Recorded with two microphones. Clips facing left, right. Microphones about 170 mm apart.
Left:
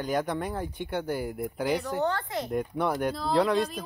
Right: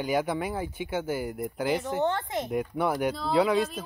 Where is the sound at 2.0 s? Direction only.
20° right (ahead or behind).